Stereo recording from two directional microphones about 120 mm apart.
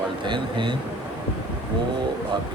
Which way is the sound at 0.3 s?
40° right (ahead or behind).